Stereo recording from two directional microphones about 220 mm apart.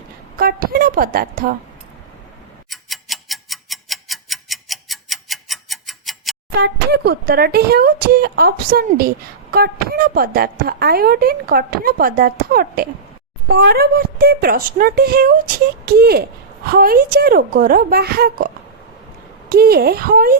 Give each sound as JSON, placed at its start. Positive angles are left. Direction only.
{"t": 0.3, "sound": "a woman's voice", "side_deg": -40}
{"t": 2.6, "sound": "tick-tock", "side_deg": 0}
{"t": 6.6, "sound": "speech", "side_deg": -45}